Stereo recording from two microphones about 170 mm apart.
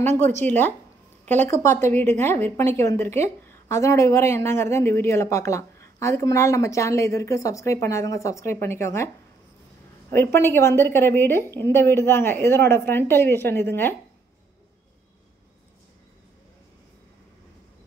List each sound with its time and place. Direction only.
0.1 s a woman's voice: 10° left (ahead or behind)
10.1 s a woman's voice: 15° left (ahead or behind)